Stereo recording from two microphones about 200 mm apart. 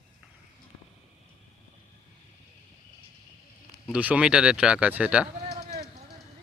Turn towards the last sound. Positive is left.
turn(degrees=-5)  # may be behind; listen again after turning